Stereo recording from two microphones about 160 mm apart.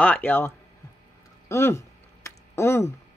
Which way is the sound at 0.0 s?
10° left (ahead or behind).